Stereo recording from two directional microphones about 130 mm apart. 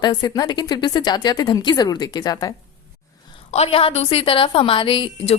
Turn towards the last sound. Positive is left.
turn(degrees=40)  # may be behind; listen again after turning